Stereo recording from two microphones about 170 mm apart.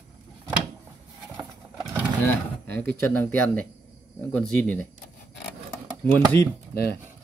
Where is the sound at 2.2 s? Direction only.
10° left (ahead or behind).